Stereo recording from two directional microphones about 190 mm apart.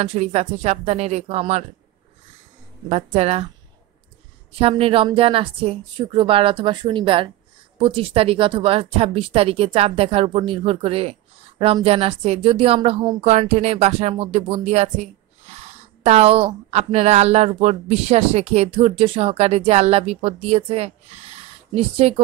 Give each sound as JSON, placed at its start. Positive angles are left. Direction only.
{"t": 0.0, "sound": "speech", "side_deg": -35}
{"t": 2.9, "sound": "speech", "side_deg": -35}
{"t": 4.5, "sound": "a woman's voice", "side_deg": -30}